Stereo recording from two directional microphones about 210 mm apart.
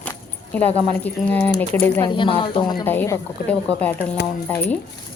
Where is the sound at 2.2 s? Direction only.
25° left (ahead or behind).